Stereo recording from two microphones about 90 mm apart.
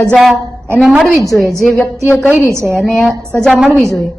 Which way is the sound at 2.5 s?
30° right (ahead or behind).